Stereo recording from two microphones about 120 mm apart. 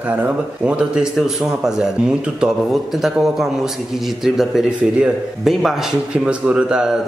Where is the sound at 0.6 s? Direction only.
5° right (ahead or behind).